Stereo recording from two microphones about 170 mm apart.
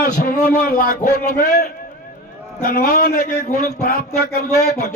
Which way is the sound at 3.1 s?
45° left (ahead or behind).